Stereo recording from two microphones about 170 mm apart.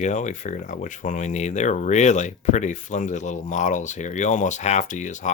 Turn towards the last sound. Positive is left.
turn(degrees=45)  # may be behind; listen again after turning